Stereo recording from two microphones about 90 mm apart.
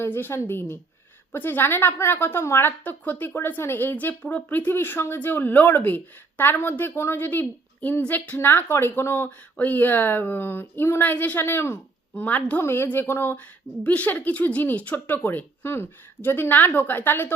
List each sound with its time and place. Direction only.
0.0 s a woman's voice: 25° left (ahead or behind)